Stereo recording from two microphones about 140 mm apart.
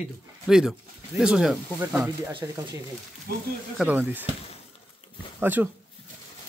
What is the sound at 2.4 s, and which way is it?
Speech, 25° right (ahead or behind).